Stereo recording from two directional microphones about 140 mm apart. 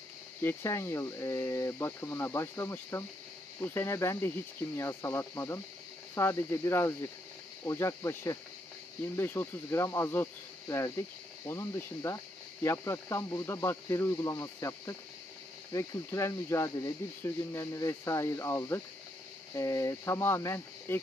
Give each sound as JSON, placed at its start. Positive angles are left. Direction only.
{"t": 0.4, "sound": "speech", "side_deg": 15}